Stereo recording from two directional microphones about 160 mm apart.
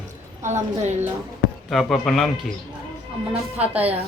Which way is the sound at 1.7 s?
Centre (ahead or behind).